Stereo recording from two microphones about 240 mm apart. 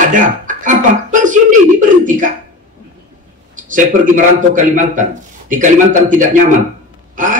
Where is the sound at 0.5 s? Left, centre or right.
Right.